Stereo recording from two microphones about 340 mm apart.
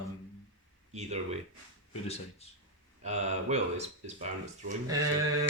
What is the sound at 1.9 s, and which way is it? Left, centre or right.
Speech, centre.